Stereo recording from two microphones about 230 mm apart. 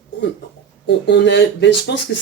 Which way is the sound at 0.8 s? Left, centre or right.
Left.